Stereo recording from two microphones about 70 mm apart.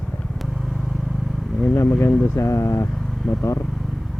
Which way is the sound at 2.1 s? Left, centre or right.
Centre.